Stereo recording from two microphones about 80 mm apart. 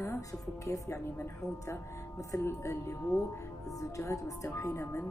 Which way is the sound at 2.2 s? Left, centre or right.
Left.